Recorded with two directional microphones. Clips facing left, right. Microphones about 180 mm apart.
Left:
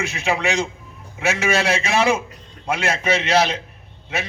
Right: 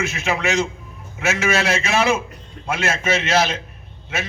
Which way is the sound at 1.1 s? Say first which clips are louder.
Even; 30° left (ahead or behind).